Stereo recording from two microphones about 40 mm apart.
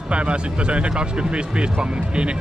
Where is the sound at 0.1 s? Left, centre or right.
Right.